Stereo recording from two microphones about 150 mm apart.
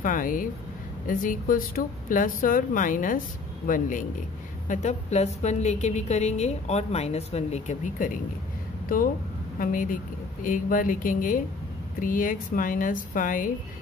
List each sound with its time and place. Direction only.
0.0 s a woman's voice: 65° left (ahead or behind)
4.6 s a woman's voice: 50° left (ahead or behind)
8.8 s a woman's voice: 70° left (ahead or behind)